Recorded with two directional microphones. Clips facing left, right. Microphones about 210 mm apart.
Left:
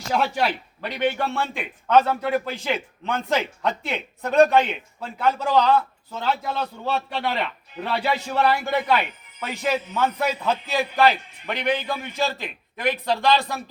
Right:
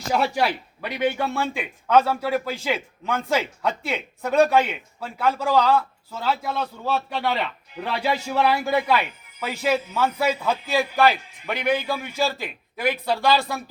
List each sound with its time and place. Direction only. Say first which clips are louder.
0.1 s a man's voice: right 1 dB; 5° right (ahead or behind)